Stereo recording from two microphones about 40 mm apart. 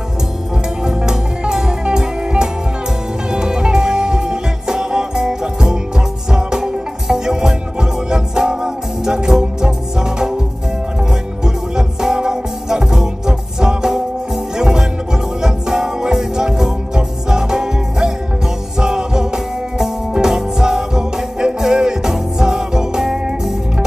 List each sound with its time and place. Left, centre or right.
0.8 s music: centre
11.4 s music: centre